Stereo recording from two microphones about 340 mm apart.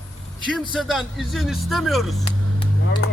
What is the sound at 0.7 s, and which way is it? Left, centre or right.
Speech, centre.